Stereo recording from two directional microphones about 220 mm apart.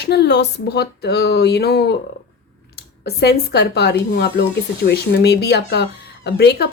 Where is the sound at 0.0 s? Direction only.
50° left (ahead or behind).